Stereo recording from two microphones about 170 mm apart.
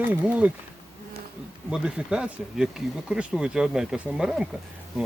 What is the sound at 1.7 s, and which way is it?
Speech, 5° right (ahead or behind).